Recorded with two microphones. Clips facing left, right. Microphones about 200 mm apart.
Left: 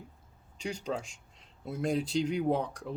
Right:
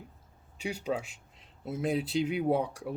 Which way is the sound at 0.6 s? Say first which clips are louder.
Right 2 dB; 5° right (ahead or behind).